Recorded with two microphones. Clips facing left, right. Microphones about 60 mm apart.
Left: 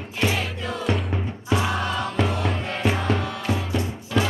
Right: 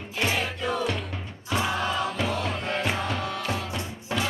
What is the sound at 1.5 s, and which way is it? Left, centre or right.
Music, centre.